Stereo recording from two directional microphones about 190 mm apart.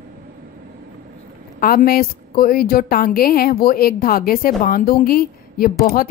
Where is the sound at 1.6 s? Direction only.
50° left (ahead or behind).